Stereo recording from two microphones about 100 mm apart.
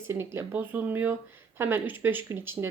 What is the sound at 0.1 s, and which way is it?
Speech, 25° right (ahead or behind).